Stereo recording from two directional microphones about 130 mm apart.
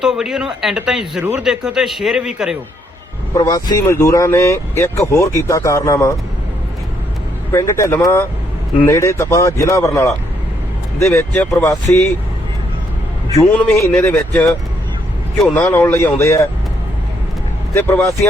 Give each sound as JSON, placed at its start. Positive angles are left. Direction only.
{"t": 0.0, "sound": "speech", "side_deg": -5}
{"t": 3.3, "sound": "speech", "side_deg": 30}
{"t": 7.5, "sound": "speech", "side_deg": 20}
{"t": 13.5, "sound": "speech", "side_deg": 10}
{"t": 15.5, "sound": "speech", "side_deg": 15}
{"t": 17.7, "sound": "speech", "side_deg": 15}